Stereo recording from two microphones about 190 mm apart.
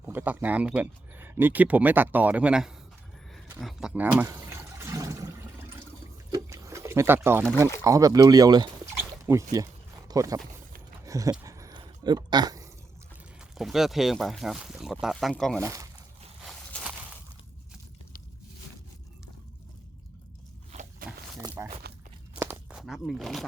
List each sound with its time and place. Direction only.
0.0 s speech: 10° right (ahead or behind)
3.6 s toilet flush: centre (ahead or behind)
6.3 s liquid: 15° right (ahead or behind)
7.9 s speech: 15° right (ahead or behind)
11.0 s a sound: 15° right (ahead or behind)
13.6 s speech: centre (ahead or behind)
15.6 s speech: 15° right (ahead or behind)
16.4 s a sound: centre (ahead or behind)
21.0 s a sound: 50° right (ahead or behind)
21.3 s walk: 15° right (ahead or behind)
22.4 s a sound: 10° right (ahead or behind)
22.8 s speech: centre (ahead or behind)